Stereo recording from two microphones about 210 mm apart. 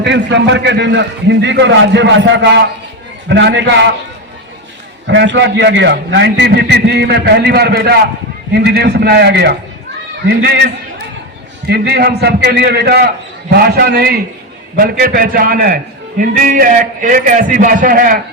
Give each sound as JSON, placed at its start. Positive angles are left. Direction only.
{"t": 0.0, "sound": "a man's voice", "side_deg": -55}
{"t": 5.0, "sound": "a man's voice", "side_deg": -60}